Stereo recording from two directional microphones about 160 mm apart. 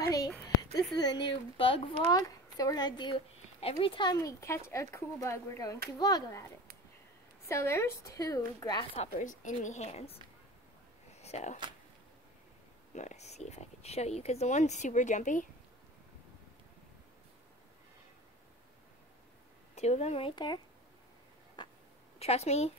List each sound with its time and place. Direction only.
0.0 s a sound: 20° left (ahead or behind)
1.6 s speech: 30° left (ahead or behind)
7.4 s speech: 15° left (ahead or behind)
8.9 s speech: 40° left (ahead or behind)
9.3 s speech: 55° left (ahead or behind)
11.1 s a sound: 45° left (ahead or behind)
12.9 s speech: 45° left (ahead or behind)
19.7 s speech: 45° left (ahead or behind); by 20.6 s 30° left (ahead or behind)
21.6 s a sound: 30° left (ahead or behind)
22.2 s speech: 40° left (ahead or behind)